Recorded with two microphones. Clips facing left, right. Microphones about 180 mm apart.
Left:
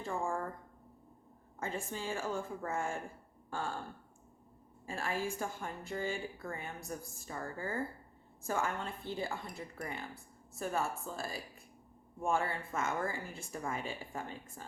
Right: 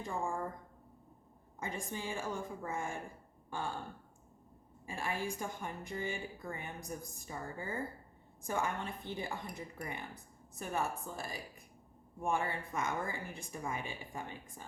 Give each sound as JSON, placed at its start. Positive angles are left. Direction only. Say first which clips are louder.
{"t": 1.5, "sound": "a woman's voice", "louder": "left 2 dB", "side_deg": -15}
{"t": 4.9, "sound": "a woman's voice", "louder": "left 1 dB", "side_deg": -15}